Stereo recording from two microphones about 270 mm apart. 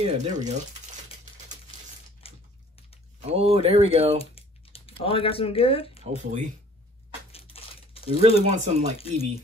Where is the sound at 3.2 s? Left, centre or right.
Right.